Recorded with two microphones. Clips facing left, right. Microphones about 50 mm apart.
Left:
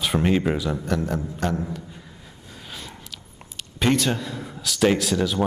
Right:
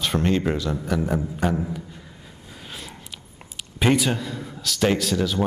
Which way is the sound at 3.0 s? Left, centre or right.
Centre.